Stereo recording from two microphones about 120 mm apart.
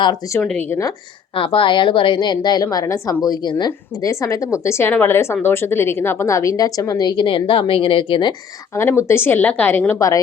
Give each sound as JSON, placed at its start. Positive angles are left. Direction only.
{"t": 0.7, "sound": "speech", "side_deg": 25}
{"t": 1.4, "sound": "a woman's voice", "side_deg": 45}
{"t": 8.7, "sound": "a woman's voice", "side_deg": 20}